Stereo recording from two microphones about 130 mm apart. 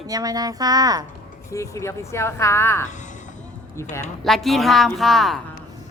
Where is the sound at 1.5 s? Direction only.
25° left (ahead or behind).